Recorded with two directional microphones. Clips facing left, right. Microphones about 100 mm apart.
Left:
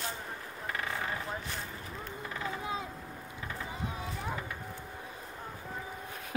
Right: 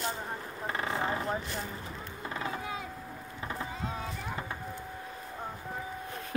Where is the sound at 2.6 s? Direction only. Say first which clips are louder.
Left 1 dB; 25° left (ahead or behind).